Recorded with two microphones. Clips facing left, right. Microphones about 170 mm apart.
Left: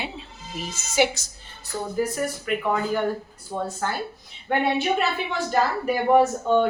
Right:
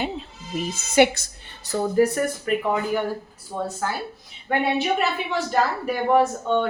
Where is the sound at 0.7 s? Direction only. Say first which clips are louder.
Right 4 dB; 55° right (ahead or behind).